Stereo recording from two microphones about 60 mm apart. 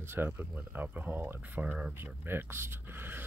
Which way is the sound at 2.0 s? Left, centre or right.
Right.